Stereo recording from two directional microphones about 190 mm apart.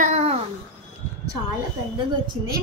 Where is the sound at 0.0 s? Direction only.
35° right (ahead or behind).